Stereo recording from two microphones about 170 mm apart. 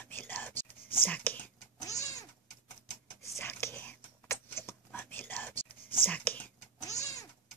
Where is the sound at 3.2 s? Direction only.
15° left (ahead or behind).